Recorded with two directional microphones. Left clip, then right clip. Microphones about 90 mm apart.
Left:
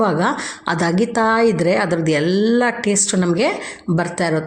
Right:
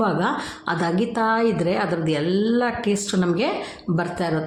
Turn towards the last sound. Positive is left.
turn(degrees=35)  # may be behind; listen again after turning